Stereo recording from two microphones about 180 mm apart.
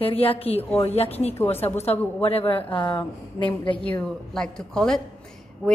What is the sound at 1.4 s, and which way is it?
Speech, 10° left (ahead or behind).